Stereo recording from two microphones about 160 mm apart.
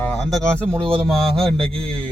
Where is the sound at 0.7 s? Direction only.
35° right (ahead or behind).